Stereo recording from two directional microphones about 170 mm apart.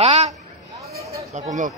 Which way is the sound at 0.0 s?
40° right (ahead or behind).